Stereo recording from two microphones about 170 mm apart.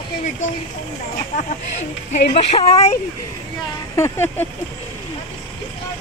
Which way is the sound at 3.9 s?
15° left (ahead or behind).